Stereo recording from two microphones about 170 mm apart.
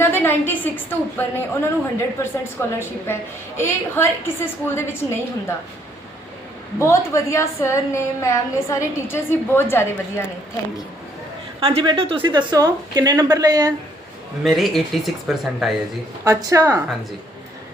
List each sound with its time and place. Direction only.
0.0 s a woman's voice: 15° left (ahead or behind)
6.7 s a woman's voice: 15° left (ahead or behind)
11.6 s a woman's voice: 30° right (ahead or behind)
14.4 s speech: centre (ahead or behind)
16.2 s a woman's voice: 20° right (ahead or behind)